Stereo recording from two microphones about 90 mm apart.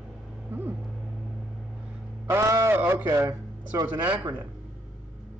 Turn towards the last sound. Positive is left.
turn(degrees=-55)  # may be behind; listen again after turning